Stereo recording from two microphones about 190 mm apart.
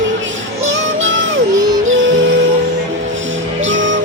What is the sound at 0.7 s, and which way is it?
Music, 80° right.